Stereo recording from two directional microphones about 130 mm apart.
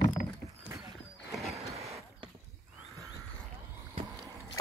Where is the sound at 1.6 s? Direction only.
55° right (ahead or behind).